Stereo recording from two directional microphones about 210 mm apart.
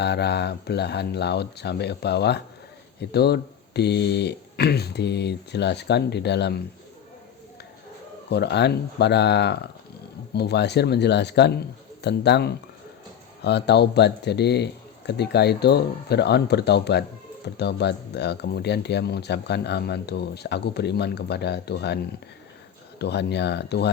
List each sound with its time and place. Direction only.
0.0 s speech: 50° left (ahead or behind)
8.3 s speech: 50° left (ahead or behind)
23.0 s speech: 50° left (ahead or behind)